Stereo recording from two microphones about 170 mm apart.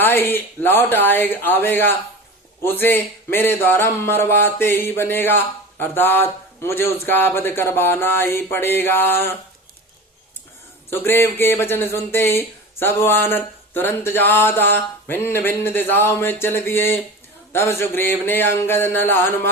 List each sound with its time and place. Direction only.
0.0 s a man's voice: 10° left (ahead or behind)
10.8 s a man's voice: 15° left (ahead or behind)